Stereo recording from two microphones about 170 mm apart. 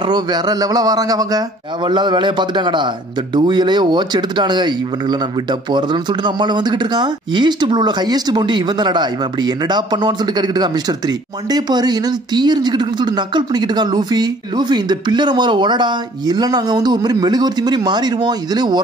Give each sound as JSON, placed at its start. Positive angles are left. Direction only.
{"t": 0.0, "sound": "speech", "side_deg": -25}